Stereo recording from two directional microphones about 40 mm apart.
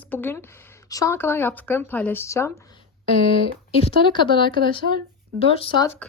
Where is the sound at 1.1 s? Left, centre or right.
Left.